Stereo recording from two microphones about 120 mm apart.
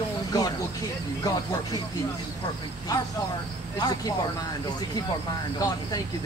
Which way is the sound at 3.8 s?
35° left (ahead or behind).